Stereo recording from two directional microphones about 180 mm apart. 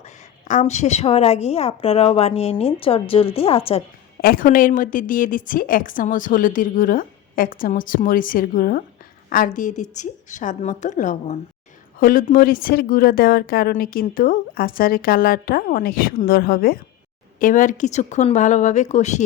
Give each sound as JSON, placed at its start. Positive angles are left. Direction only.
{"t": 0.0, "sound": "a sound", "side_deg": 45}
{"t": 0.6, "sound": "a woman's voice", "side_deg": 40}
{"t": 4.2, "sound": "a woman's voice", "side_deg": 55}